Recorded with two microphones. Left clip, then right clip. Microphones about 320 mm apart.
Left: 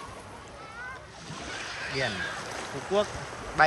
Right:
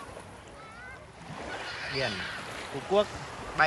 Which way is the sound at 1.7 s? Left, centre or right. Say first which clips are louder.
Left 1 dB; left.